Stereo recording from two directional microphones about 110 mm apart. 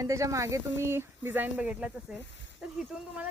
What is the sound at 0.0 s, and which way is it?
Speech, 30° right (ahead or behind).